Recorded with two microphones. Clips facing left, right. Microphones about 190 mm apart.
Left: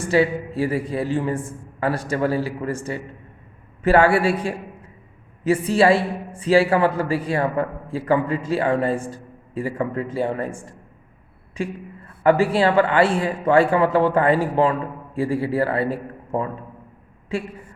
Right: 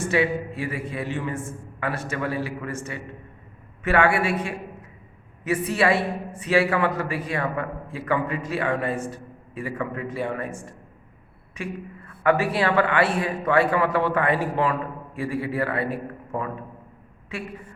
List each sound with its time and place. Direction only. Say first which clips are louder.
0.0 s a woman's voice: left 4 dB; 35° left (ahead or behind)